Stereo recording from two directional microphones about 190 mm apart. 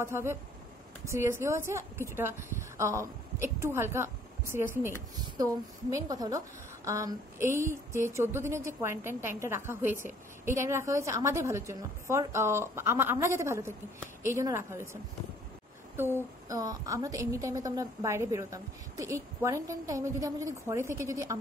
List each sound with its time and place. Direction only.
0.0 s a woman's voice: 15° right (ahead or behind)
16.2 s a woman's voice: 20° right (ahead or behind)